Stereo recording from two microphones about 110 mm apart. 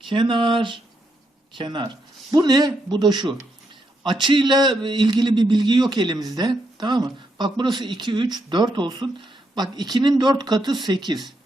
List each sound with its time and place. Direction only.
0.1 s a man's voice: 45° right (ahead or behind)